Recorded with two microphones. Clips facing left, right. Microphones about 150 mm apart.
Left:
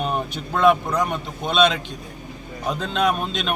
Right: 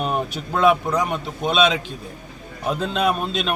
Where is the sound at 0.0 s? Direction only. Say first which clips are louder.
Right 1 dB; 5° right (ahead or behind).